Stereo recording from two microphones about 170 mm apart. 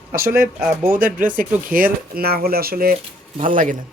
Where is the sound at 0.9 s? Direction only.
55° right (ahead or behind).